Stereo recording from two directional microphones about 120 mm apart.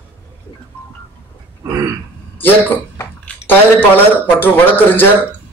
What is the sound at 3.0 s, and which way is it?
A man's voice, 15° left (ahead or behind).